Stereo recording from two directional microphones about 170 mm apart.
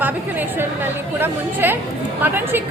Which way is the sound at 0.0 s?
10° right (ahead or behind).